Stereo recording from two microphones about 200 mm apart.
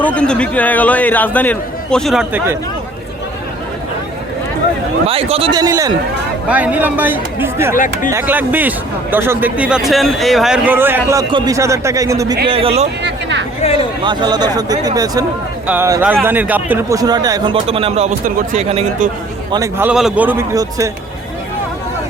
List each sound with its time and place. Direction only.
0.0 s a man's voice: 5° left (ahead or behind)
5.0 s speech: 30° right (ahead or behind)
12.5 s speech: 30° right (ahead or behind)
13.0 s a sound: 60° right (ahead or behind)
13.6 s speech: 30° left (ahead or behind)
14.0 s speech: 25° right (ahead or behind)
19.5 s speech: 15° right (ahead or behind)
19.9 s speech: 5° right (ahead or behind)